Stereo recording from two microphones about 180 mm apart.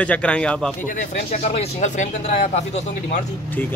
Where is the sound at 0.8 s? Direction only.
45° left (ahead or behind).